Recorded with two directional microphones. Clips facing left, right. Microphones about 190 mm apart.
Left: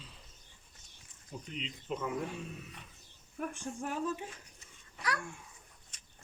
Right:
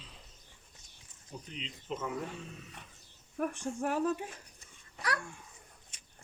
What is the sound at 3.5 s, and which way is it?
Speech, 65° right (ahead or behind).